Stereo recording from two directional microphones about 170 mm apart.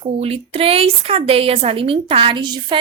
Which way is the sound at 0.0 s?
35° right (ahead or behind).